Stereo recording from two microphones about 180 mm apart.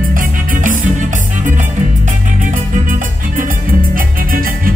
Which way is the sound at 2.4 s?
45° right (ahead or behind).